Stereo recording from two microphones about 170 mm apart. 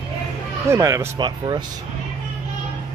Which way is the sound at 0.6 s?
15° right (ahead or behind).